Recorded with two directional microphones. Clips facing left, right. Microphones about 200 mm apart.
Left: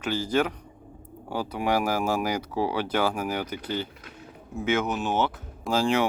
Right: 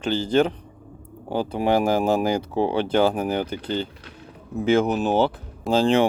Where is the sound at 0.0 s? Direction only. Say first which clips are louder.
Right 5 dB; 30° right (ahead or behind).